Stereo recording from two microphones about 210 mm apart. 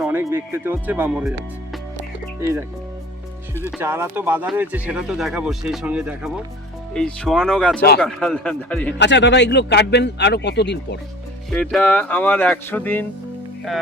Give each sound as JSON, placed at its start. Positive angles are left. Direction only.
{"t": 0.0, "sound": "speech", "side_deg": -10}
{"t": 2.4, "sound": "speech", "side_deg": -15}
{"t": 3.7, "sound": "a man's voice", "side_deg": -10}
{"t": 9.0, "sound": "speech", "side_deg": 55}
{"t": 11.5, "sound": "speech", "side_deg": 5}